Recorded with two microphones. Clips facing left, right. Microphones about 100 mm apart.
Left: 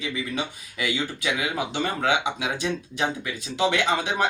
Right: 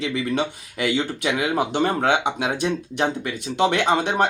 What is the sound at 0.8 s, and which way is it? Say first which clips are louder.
Speech: right 5 dB; 45° right (ahead or behind).